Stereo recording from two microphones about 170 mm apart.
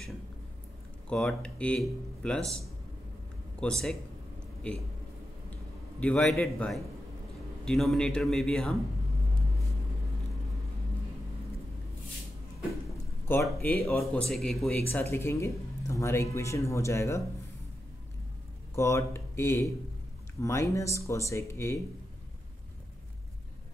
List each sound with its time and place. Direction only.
1.0 s a man's voice: 5° left (ahead or behind)
13.3 s speech: 10° left (ahead or behind)
13.8 s speech: centre (ahead or behind)
14.9 s speech: 15° left (ahead or behind)
18.8 s speech: 15° left (ahead or behind)